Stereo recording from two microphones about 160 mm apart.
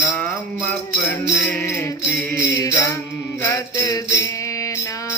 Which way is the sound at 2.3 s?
20° left (ahead or behind).